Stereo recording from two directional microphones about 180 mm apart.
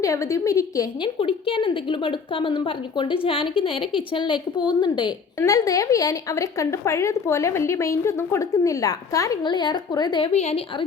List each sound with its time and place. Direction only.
0.0 s a woman's voice: 15° left (ahead or behind)
1.2 s a woman's voice: 30° left (ahead or behind)